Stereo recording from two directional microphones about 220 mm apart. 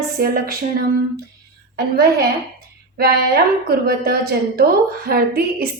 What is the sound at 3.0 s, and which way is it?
A woman's voice, 45° right (ahead or behind).